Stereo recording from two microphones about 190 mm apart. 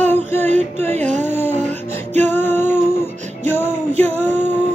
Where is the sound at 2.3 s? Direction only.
10° left (ahead or behind).